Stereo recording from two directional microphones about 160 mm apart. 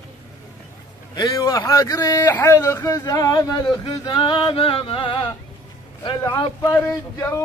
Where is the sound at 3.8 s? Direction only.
30° left (ahead or behind).